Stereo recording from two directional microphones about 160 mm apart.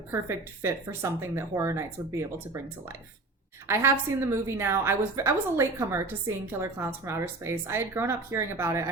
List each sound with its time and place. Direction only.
0.1 s a woman's voice: 15° right (ahead or behind)
3.7 s a woman's voice: 15° right (ahead or behind)